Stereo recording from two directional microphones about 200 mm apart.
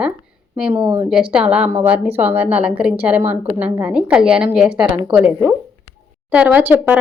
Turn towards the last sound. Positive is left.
turn(degrees=-10)  # may be behind; listen again after turning